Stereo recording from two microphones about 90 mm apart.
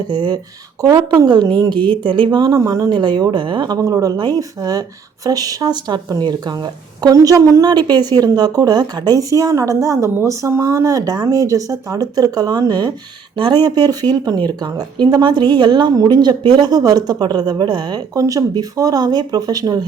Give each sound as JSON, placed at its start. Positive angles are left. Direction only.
{"t": 0.1, "sound": "a woman's voice", "side_deg": -55}
{"t": 0.8, "sound": "a woman's voice", "side_deg": -40}
{"t": 1.2, "sound": "a woman's voice", "side_deg": -55}
{"t": 1.7, "sound": "speech", "side_deg": 15}
{"t": 2.0, "sound": "speech", "side_deg": -70}
{"t": 2.6, "sound": "a woman's voice", "side_deg": -40}
{"t": 2.9, "sound": "speech", "side_deg": -55}
{"t": 3.8, "sound": "a woman's voice", "side_deg": -40}
{"t": 7.0, "sound": "a woman's voice", "side_deg": -40}
{"t": 13.3, "sound": "a woman's voice", "side_deg": -60}